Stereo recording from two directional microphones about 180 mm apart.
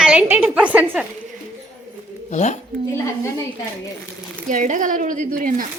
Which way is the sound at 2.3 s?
45° left (ahead or behind).